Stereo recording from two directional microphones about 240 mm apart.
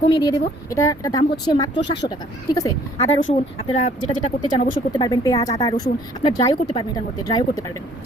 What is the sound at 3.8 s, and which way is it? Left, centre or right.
Speech, left.